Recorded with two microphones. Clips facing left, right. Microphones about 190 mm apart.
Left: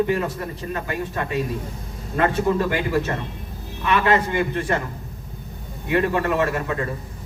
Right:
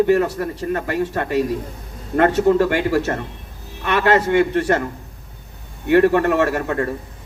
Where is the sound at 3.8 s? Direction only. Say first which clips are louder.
Right 3 dB; 70° right (ahead or behind).